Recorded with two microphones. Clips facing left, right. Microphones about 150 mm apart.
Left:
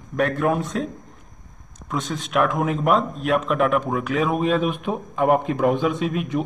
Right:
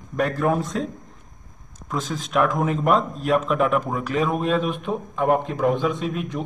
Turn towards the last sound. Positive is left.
turn(degrees=0)  # may be behind; listen again after turning